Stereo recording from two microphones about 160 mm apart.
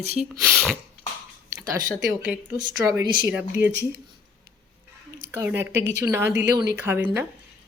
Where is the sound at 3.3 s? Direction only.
10° right (ahead or behind).